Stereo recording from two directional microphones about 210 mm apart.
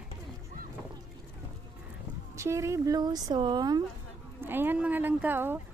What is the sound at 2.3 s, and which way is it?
Speech, 15° right (ahead or behind).